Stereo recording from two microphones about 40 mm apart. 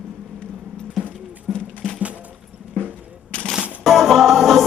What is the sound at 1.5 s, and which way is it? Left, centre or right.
Music, left.